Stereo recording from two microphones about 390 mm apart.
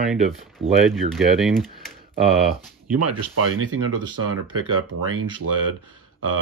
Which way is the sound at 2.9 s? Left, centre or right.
Right.